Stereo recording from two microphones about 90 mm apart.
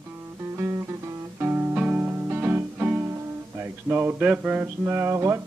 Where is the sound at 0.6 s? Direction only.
30° right (ahead or behind).